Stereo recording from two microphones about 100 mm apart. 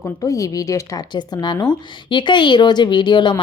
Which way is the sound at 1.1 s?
50° left (ahead or behind).